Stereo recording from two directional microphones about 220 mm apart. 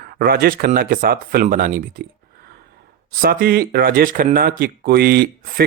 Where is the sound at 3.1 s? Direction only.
40° right (ahead or behind).